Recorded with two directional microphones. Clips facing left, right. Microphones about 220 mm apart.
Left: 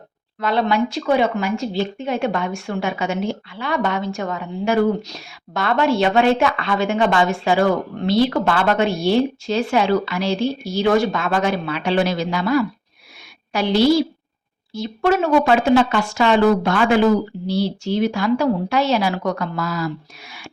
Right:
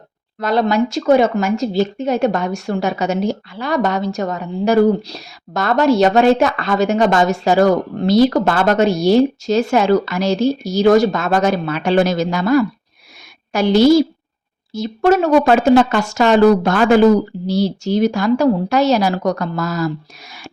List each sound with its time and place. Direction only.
0.3 s speech: 40° right (ahead or behind)